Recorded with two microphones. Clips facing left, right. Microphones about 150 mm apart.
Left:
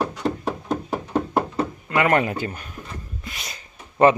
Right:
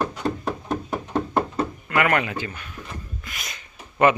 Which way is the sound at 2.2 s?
40° left (ahead or behind).